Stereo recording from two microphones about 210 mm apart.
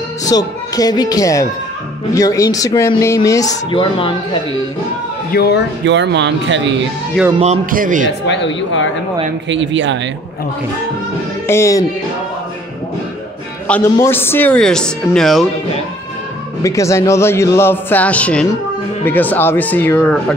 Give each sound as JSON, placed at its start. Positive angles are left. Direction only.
{"t": 0.2, "sound": "speech", "side_deg": 15}
{"t": 5.3, "sound": "speech", "side_deg": 50}
{"t": 5.9, "sound": "speech", "side_deg": -55}
{"t": 7.3, "sound": "speech", "side_deg": -30}
{"t": 7.7, "sound": "a man's voice", "side_deg": -40}
{"t": 8.3, "sound": "speech", "side_deg": 60}
{"t": 9.5, "sound": "speech", "side_deg": -60}
{"t": 11.4, "sound": "speech", "side_deg": 15}
{"t": 13.9, "sound": "speech", "side_deg": 10}
{"t": 16.6, "sound": "speech", "side_deg": 15}